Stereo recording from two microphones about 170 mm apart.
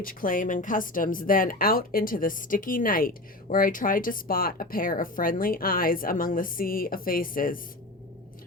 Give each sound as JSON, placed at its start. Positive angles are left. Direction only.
{"t": 0.0, "sound": "a woman's voice", "side_deg": 55}